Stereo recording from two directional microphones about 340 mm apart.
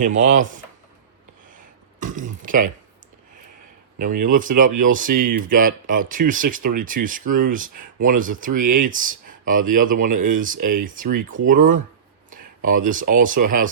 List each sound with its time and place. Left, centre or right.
0.0 s speech: right
1.5 s throat clearing: right
4.2 s speech: right
12.3 s a sound: right
13.1 s speech: right